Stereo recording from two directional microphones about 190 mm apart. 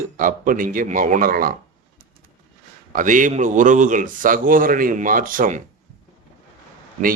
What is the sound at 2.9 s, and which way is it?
A man's voice, 45° right (ahead or behind).